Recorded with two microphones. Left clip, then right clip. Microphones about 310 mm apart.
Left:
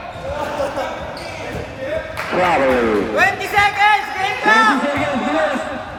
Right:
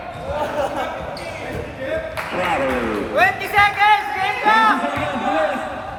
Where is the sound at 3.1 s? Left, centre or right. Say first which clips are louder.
Right 2 dB; left.